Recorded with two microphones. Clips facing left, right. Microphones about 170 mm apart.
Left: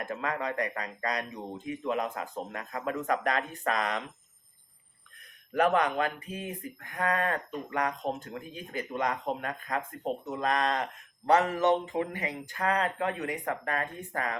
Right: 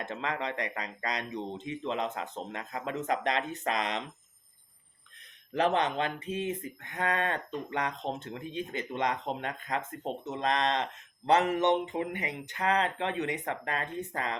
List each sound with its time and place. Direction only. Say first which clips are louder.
0.0 s speech: left 1 dB; 25° right (ahead or behind)
5.5 s speech: left 2 dB; 25° right (ahead or behind)